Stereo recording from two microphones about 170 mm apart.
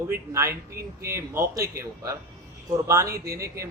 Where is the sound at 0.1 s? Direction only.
15° right (ahead or behind).